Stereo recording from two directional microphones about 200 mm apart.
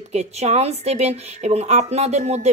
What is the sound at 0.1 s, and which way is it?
A woman's voice, 35° right (ahead or behind).